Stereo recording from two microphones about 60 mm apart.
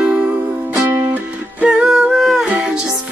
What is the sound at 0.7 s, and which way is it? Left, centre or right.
Music, right.